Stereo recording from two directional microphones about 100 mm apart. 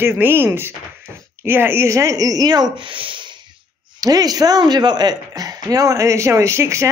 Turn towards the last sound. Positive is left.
turn(degrees=-30)  # may be behind; listen again after turning